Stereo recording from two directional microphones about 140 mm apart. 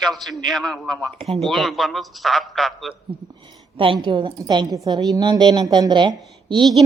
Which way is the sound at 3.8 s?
35° right (ahead or behind).